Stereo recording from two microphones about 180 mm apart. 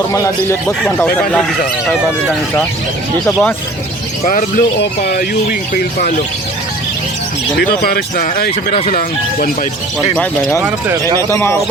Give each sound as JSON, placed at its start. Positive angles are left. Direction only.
{"t": 0.1, "sound": "a man's voice", "side_deg": 15}
{"t": 4.2, "sound": "a man's voice", "side_deg": 45}
{"t": 4.8, "sound": "speech", "side_deg": 65}
{"t": 7.6, "sound": "speech", "side_deg": 60}
{"t": 10.6, "sound": "speech", "side_deg": -15}
{"t": 11.3, "sound": "a man's voice", "side_deg": 15}